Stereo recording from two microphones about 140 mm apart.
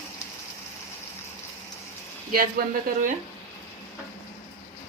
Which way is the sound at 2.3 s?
90° right.